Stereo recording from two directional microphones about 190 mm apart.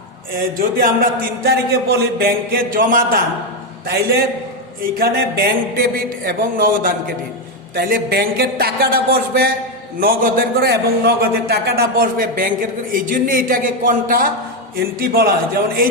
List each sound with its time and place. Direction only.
0.8 s a man's voice: 50° right (ahead or behind)
4.9 s a man's voice: 55° right (ahead or behind)